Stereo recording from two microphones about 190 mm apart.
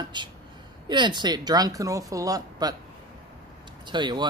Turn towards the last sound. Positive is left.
turn(degrees=-25)  # may be behind; listen again after turning